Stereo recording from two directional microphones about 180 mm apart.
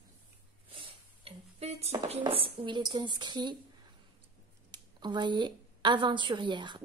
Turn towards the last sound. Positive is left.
turn(degrees=-25)  # may be behind; listen again after turning